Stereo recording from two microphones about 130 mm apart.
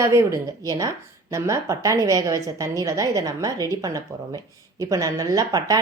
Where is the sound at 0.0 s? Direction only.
25° right (ahead or behind).